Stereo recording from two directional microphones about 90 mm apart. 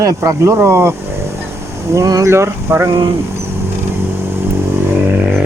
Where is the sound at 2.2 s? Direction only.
30° right (ahead or behind).